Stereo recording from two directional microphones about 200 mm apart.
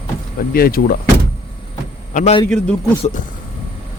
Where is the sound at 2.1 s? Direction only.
35° left (ahead or behind).